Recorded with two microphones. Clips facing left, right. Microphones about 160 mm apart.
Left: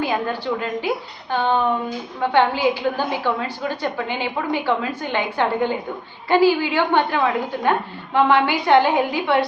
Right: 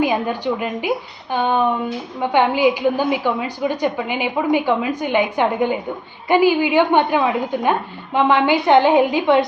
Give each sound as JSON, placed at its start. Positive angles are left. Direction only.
{"t": 0.0, "sound": "a woman's voice", "side_deg": -15}